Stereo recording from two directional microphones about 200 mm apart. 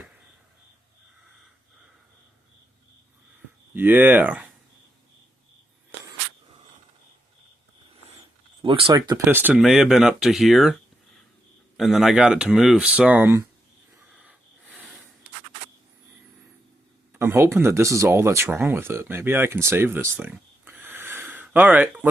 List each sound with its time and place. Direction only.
3.8 s speech: 10° right (ahead or behind)
8.6 s speech: 25° right (ahead or behind); by 10.8 s centre (ahead or behind)
11.8 s speech: centre (ahead or behind)
14.1 s wheeze: 5° right (ahead or behind)
17.1 s speech: 10° right (ahead or behind)